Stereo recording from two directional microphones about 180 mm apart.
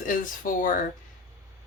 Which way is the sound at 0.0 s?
50° left (ahead or behind).